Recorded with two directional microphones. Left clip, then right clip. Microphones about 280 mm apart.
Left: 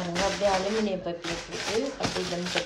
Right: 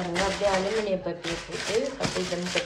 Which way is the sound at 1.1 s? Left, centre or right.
Centre.